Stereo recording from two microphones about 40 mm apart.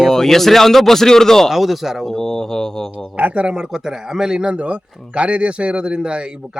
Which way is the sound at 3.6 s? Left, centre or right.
Centre.